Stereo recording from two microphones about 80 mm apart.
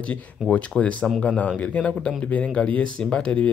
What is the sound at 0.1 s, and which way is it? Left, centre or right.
Speech, centre.